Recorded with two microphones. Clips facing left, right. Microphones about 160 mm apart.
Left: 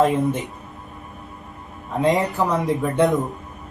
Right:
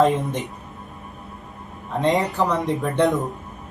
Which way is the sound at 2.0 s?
Centre (ahead or behind).